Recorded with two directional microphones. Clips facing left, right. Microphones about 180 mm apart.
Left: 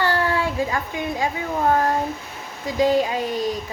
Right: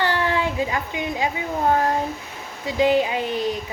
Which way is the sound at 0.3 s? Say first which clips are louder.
Even; 20° right (ahead or behind).